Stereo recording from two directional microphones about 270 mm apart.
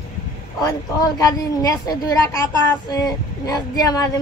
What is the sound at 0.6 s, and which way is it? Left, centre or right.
Speech, centre.